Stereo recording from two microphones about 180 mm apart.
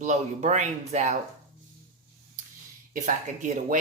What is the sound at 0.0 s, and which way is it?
Speech, 40° right (ahead or behind).